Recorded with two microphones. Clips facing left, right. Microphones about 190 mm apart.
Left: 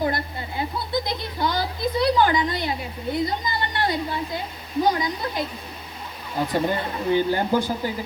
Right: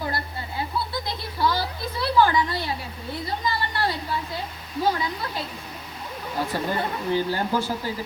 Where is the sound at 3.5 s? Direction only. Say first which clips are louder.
Left 1 dB; 20° left (ahead or behind).